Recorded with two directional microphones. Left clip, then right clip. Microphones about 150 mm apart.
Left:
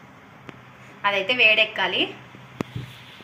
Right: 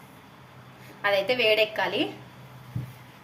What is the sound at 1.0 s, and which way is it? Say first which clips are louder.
Speech: left 4 dB; 85° right.